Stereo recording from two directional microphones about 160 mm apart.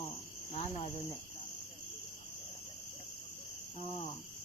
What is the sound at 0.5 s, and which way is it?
Cricket, 40° left (ahead or behind).